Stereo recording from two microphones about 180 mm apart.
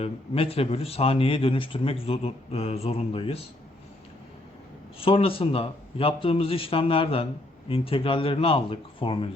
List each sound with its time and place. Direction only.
0.0 s speech: 35° left (ahead or behind)
4.9 s speech: 30° left (ahead or behind)